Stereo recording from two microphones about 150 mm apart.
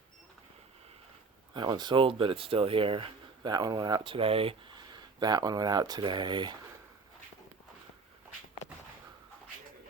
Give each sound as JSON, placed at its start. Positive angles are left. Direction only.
{"t": 1.5, "sound": "speech", "side_deg": -30}